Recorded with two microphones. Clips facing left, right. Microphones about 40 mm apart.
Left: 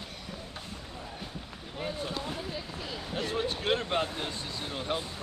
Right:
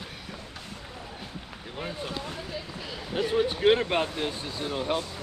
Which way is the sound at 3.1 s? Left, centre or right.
Centre.